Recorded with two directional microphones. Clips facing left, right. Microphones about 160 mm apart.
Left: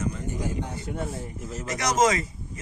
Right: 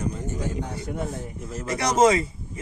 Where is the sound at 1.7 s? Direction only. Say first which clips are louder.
Right 4 dB; 30° right (ahead or behind).